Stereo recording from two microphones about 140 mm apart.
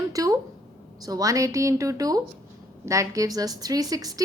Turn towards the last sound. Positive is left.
turn(degrees=-25)  # may be behind; listen again after turning